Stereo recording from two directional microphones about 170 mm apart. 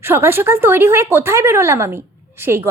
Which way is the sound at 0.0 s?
15° right (ahead or behind).